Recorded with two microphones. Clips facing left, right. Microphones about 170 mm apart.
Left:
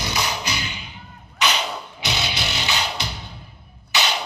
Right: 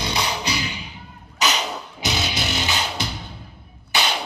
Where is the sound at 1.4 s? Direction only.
40° right (ahead or behind).